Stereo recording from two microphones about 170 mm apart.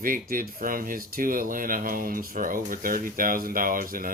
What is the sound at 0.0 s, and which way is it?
Speech, 55° right (ahead or behind).